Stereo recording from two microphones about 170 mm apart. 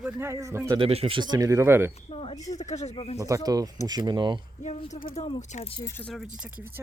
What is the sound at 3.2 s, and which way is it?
Speech, 20° right (ahead or behind).